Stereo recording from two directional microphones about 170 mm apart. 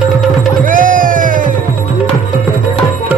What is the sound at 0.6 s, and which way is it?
Music, 50° right (ahead or behind).